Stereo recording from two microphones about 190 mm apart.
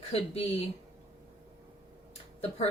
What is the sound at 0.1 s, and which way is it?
Speech, 30° left (ahead or behind).